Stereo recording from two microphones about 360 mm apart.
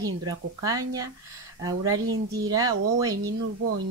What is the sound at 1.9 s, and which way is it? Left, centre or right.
Speech, right.